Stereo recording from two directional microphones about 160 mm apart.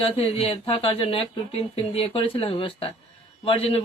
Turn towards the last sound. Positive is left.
turn(degrees=40)  # may be behind; listen again after turning